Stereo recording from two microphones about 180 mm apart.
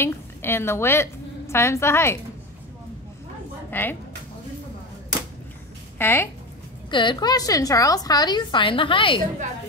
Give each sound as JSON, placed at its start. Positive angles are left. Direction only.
{"t": 0.0, "sound": "a woman's voice", "side_deg": 15}
{"t": 3.7, "sound": "a woman's voice", "side_deg": 10}
{"t": 5.9, "sound": "speech", "side_deg": 10}
{"t": 6.9, "sound": "a woman's voice", "side_deg": 25}